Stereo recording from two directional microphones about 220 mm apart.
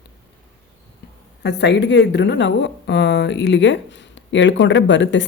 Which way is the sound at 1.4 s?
50° left (ahead or behind).